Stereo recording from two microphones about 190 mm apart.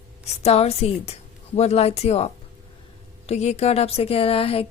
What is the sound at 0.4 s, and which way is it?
A woman's voice, 35° left (ahead or behind).